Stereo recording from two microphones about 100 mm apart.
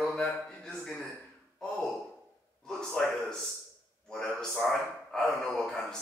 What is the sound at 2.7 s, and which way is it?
A man's voice, 5° left (ahead or behind).